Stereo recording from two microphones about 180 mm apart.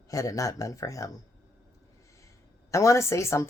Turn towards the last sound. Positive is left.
turn(degrees=15)  # may be behind; listen again after turning